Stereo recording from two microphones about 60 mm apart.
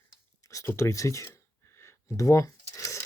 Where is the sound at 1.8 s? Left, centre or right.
Left.